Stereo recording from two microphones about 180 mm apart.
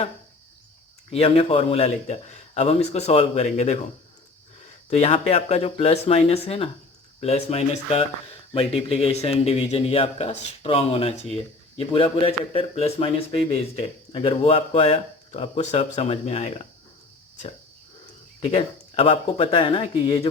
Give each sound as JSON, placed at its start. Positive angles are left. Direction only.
{"t": 1.1, "sound": "a man's voice", "side_deg": 30}
{"t": 4.9, "sound": "a man's voice", "side_deg": 35}
{"t": 18.4, "sound": "a man's voice", "side_deg": 35}